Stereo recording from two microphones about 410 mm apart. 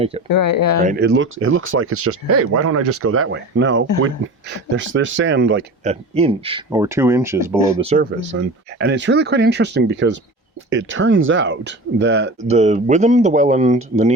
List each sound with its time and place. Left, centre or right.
0.3 s speech: left
0.9 s speech: right
5.8 s speech: centre
8.3 s speech: right